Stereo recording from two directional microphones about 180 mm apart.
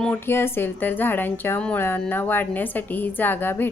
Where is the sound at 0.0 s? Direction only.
10° left (ahead or behind).